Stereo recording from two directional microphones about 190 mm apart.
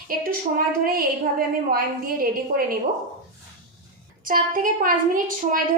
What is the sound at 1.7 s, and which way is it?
A woman's voice, 50° right (ahead or behind).